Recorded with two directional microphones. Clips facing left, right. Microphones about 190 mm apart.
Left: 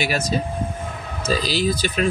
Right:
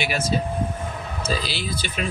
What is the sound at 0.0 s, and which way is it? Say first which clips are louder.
Speech: left 1 dB; 40° left (ahead or behind).